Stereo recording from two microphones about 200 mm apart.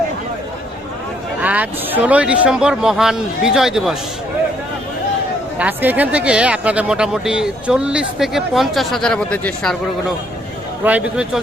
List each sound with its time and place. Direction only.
1.4 s speech: 10° right (ahead or behind)
5.5 s speech: 10° right (ahead or behind)
10.8 s speech: 5° right (ahead or behind)